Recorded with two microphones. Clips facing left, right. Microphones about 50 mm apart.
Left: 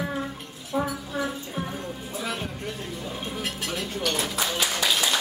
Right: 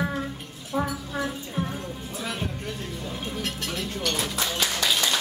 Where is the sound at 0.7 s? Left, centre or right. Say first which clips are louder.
Even; centre.